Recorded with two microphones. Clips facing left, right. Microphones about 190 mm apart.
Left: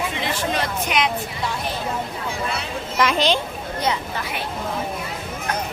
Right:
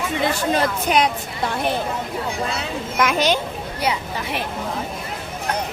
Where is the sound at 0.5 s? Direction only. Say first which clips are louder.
Right 5 dB; 35° right (ahead or behind).